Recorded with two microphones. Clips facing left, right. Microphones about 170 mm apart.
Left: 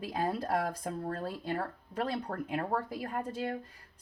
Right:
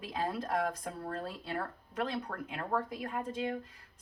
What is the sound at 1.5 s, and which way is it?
Speech, 30° left (ahead or behind).